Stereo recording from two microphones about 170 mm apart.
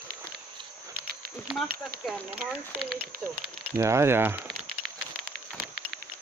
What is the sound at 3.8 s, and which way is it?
Speech, 15° right (ahead or behind).